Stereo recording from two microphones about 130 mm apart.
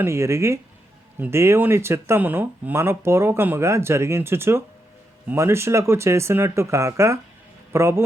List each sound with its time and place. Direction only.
0.0 s speech: 20° right (ahead or behind)